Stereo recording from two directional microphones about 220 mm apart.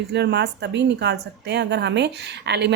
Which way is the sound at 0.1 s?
50° right (ahead or behind).